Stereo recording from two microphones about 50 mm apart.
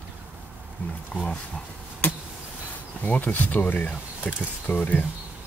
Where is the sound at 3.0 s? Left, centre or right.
Left.